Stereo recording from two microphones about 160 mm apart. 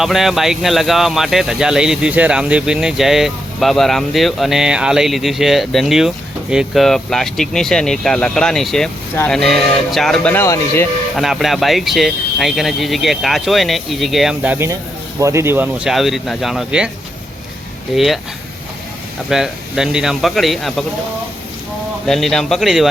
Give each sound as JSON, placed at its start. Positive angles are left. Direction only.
{"t": 0.0, "sound": "speech", "side_deg": 0}
{"t": 10.3, "sound": "speech", "side_deg": 15}
{"t": 11.2, "sound": "speech", "side_deg": 0}
{"t": 17.9, "sound": "speech", "side_deg": 0}
{"t": 19.3, "sound": "speech", "side_deg": -5}
{"t": 22.0, "sound": "speech", "side_deg": 0}